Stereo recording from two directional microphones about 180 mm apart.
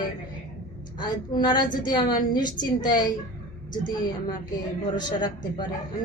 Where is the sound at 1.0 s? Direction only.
25° left (ahead or behind).